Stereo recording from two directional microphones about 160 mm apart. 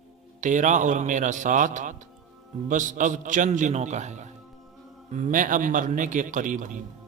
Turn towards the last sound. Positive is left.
turn(degrees=-50)  # may be behind; listen again after turning